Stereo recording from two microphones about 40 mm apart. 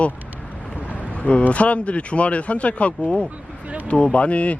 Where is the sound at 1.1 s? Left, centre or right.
Left.